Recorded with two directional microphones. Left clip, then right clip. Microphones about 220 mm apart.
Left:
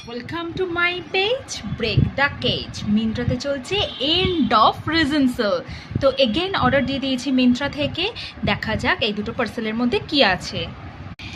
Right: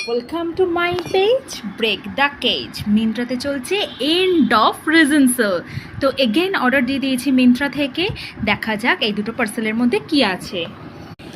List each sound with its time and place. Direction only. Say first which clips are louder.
0.3 s speech: right 2 dB; 20° left (ahead or behind)
1.8 s a woman's voice: right 3 dB; 5° right (ahead or behind); by 10.4 s 10° left (ahead or behind)